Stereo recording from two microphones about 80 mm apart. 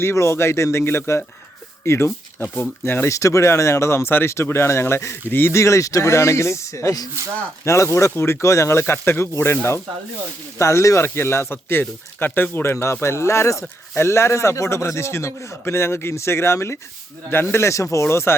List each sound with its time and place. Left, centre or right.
0.0 s speech: left
3.2 s speech: left
10.6 s speech: left